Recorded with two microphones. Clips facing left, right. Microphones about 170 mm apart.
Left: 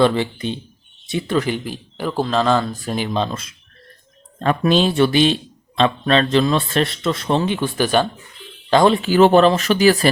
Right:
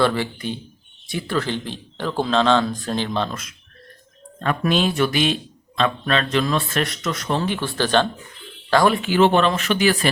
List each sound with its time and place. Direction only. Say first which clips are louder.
0.0 s speech: left 4 dB; 20° left (ahead or behind)
4.4 s speech: left 4 dB; 30° left (ahead or behind); by 8.0 s 10° left (ahead or behind)
8.7 s speech: left 3 dB; 25° left (ahead or behind)
9.0 s speech: left 5 dB; 40° left (ahead or behind)